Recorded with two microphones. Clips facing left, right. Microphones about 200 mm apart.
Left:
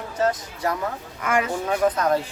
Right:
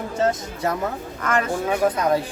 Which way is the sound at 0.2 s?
25° right (ahead or behind).